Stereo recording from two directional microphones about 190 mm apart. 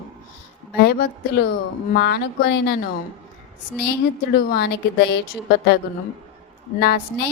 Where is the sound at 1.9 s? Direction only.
60° left (ahead or behind).